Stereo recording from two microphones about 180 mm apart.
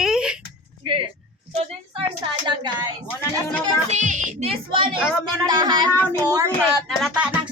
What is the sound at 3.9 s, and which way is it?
Speech, 45° right (ahead or behind).